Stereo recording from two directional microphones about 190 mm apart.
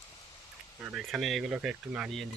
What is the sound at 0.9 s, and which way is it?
Speech, centre (ahead or behind).